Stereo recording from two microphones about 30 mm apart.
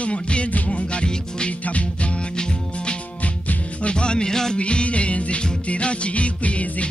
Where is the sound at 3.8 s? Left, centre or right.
Left.